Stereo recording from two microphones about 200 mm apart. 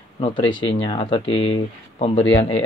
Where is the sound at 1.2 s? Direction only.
85° left.